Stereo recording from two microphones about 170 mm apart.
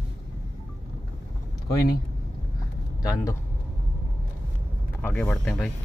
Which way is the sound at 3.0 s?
20° left (ahead or behind).